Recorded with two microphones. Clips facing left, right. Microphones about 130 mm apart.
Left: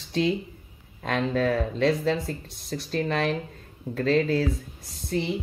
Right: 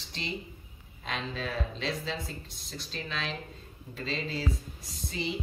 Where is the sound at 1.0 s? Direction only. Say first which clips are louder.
Left 11 dB; 60° left (ahead or behind).